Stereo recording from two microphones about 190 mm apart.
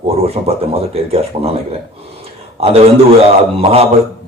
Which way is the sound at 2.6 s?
30° right (ahead or behind).